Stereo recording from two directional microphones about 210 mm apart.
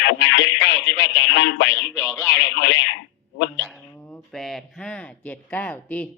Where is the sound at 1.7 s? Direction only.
5° left (ahead or behind).